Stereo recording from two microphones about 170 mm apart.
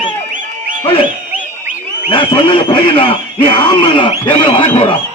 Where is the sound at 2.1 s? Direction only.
30° left (ahead or behind).